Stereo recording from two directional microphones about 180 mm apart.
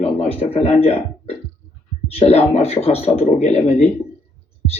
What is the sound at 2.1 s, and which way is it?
Speech, 35° left (ahead or behind).